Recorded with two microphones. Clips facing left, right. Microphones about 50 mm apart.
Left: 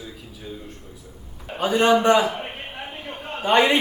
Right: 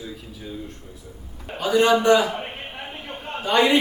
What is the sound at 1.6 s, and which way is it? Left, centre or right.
Speech, left.